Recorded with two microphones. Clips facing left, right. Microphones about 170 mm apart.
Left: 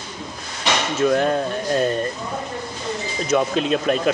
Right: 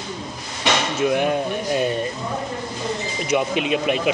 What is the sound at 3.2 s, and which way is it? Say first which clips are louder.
Speech: left 2 dB; 10° right (ahead or behind).